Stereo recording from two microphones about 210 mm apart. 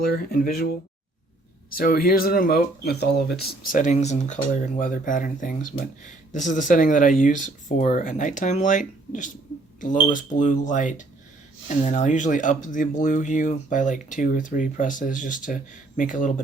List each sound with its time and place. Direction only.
0.0 s speech: 45° left (ahead or behind)
1.7 s speech: 45° left (ahead or behind)
3.7 s speech: 35° left (ahead or behind)